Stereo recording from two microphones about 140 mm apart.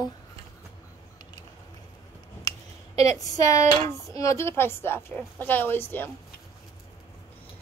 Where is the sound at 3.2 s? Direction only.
25° left (ahead or behind).